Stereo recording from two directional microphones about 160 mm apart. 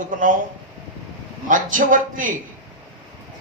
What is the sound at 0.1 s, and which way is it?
Speech, 55° right (ahead or behind).